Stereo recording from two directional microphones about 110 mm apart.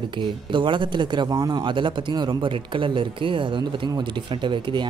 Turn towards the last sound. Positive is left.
turn(degrees=-45)  # may be behind; listen again after turning